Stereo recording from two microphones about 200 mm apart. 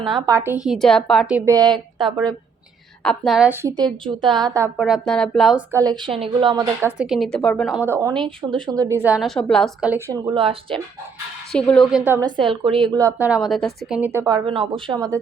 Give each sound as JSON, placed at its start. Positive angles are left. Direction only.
{"t": 0.0, "sound": "a woman's voice", "side_deg": -25}
{"t": 1.5, "sound": "speech", "side_deg": -20}
{"t": 3.0, "sound": "a woman's voice", "side_deg": 0}
{"t": 4.8, "sound": "a woman's voice", "side_deg": 0}
{"t": 6.0, "sound": "speech", "side_deg": -25}
{"t": 7.0, "sound": "a woman's voice", "side_deg": 0}
{"t": 7.9, "sound": "a woman's voice", "side_deg": -15}
{"t": 8.2, "sound": "a woman's voice", "side_deg": -25}
{"t": 9.9, "sound": "speech", "side_deg": -20}
{"t": 11.5, "sound": "a woman's voice", "side_deg": 5}
{"t": 12.4, "sound": "a woman's voice", "side_deg": -25}